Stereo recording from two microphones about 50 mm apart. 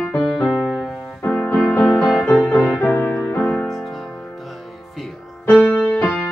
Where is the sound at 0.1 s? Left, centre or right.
Left.